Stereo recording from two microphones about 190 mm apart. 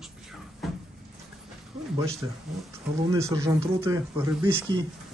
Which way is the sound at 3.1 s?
15° right (ahead or behind).